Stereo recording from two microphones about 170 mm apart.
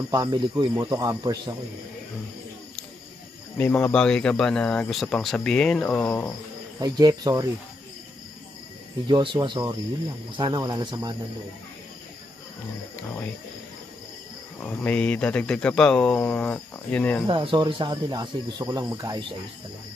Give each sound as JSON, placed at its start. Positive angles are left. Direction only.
{"t": 0.1, "sound": "speech", "side_deg": -25}
{"t": 3.5, "sound": "speech", "side_deg": 5}
{"t": 6.8, "sound": "speech", "side_deg": -20}
{"t": 9.0, "sound": "speech", "side_deg": -25}
{"t": 14.6, "sound": "speech", "side_deg": 10}
{"t": 17.3, "sound": "speech", "side_deg": -30}